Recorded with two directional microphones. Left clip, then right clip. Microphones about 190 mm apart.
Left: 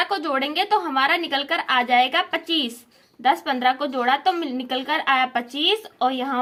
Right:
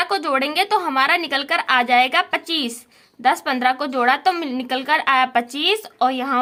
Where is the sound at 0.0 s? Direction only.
25° right (ahead or behind).